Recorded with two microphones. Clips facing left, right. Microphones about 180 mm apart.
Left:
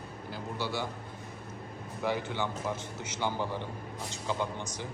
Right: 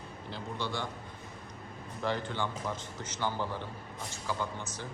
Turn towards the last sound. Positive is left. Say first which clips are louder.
# left 3 dB
turn(degrees=15)  # may be behind; listen again after turning